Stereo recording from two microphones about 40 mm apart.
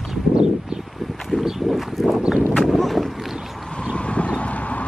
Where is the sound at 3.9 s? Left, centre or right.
Left.